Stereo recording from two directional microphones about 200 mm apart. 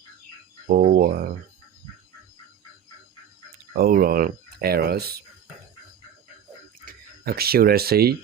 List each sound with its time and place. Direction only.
0.7 s speech: 40° right (ahead or behind)
3.8 s speech: 50° right (ahead or behind)
6.8 s speech: 50° right (ahead or behind)